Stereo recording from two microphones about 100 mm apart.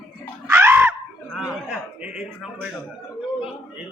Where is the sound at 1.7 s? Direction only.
10° right (ahead or behind).